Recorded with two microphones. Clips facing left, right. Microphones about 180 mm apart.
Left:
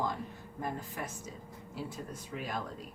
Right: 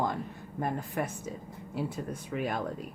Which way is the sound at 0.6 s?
60° right (ahead or behind).